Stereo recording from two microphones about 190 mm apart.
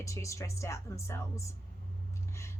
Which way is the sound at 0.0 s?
15° left (ahead or behind).